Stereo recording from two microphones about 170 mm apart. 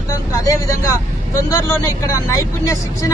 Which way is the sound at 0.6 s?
20° left (ahead or behind).